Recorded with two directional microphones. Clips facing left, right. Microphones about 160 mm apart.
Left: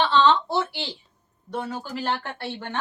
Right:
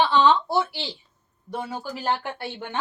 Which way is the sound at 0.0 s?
10° right (ahead or behind).